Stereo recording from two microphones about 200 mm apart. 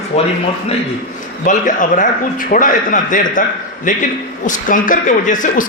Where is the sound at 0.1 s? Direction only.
35° left (ahead or behind).